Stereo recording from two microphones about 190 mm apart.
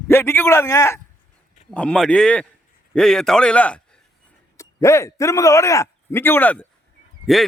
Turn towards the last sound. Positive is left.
turn(degrees=0)  # may be behind; listen again after turning